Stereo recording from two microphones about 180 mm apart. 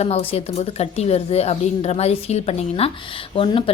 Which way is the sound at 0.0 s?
35° left (ahead or behind).